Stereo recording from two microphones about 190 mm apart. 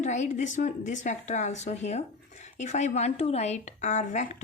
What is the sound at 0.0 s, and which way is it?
A woman's voice, 40° left (ahead or behind).